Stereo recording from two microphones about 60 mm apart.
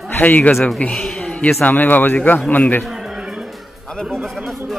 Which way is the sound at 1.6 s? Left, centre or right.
Left.